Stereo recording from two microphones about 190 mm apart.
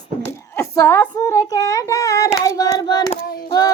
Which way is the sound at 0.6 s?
15° left (ahead or behind).